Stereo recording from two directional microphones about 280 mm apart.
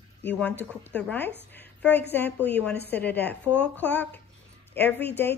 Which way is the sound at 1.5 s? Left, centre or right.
Centre.